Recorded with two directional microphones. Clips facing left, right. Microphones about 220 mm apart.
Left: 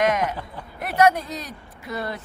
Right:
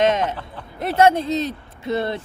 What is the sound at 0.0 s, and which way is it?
Speech, 25° right (ahead or behind).